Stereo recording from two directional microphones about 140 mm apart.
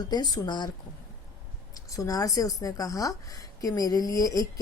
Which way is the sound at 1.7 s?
25° left (ahead or behind).